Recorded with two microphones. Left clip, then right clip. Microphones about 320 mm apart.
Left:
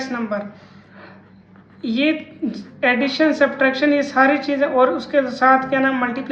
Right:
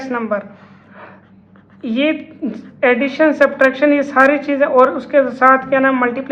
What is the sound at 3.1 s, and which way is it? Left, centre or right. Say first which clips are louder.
Speech: right 4 dB; centre.